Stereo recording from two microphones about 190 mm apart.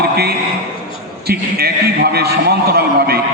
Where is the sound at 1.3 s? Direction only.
55° right (ahead or behind).